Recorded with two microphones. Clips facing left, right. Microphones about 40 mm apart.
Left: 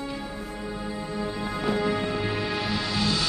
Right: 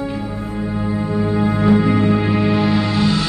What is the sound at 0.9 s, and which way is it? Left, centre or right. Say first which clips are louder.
Music: right 12 dB; right.